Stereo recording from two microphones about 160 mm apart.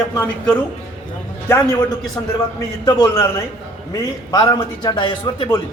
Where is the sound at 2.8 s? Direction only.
25° left (ahead or behind).